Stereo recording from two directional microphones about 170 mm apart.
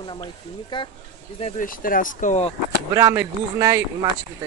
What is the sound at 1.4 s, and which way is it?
Speech, 55° left (ahead or behind).